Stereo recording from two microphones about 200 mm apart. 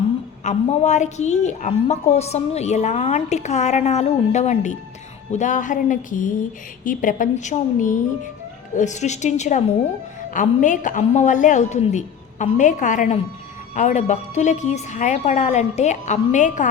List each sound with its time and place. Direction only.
0.4 s a woman's voice: 35° left (ahead or behind)